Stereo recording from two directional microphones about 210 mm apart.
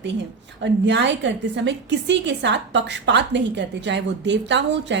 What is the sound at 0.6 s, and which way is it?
A woman's voice, 55° right (ahead or behind).